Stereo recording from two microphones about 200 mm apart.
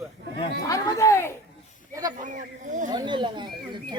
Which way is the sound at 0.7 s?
15° left (ahead or behind).